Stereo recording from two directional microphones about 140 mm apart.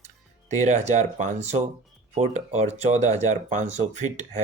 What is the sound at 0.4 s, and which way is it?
Speech, 60° right (ahead or behind).